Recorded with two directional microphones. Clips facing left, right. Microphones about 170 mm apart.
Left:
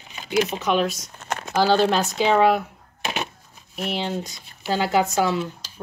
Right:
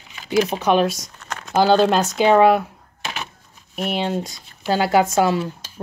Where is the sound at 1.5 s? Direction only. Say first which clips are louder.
Right 3 dB; 50° right (ahead or behind).